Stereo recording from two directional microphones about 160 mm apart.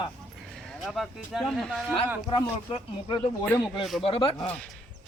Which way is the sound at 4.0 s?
35° left (ahead or behind).